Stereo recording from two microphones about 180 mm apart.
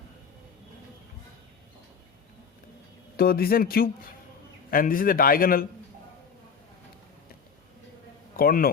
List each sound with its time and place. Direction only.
3.2 s a man's voice: 55° left (ahead or behind)
8.4 s speech: 55° left (ahead or behind)